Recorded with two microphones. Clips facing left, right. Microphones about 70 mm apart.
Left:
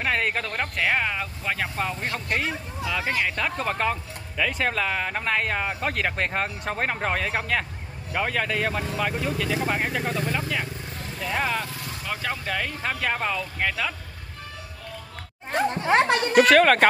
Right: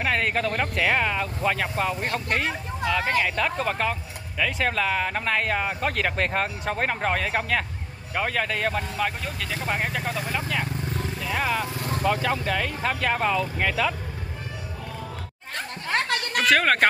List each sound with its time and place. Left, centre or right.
0.0 s speech: centre
11.1 s vehicle: centre
12.1 s speech: centre
15.5 s a sound: left
16.4 s speech: centre